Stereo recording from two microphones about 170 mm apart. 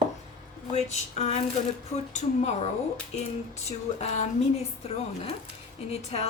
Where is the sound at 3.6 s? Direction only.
40° left (ahead or behind).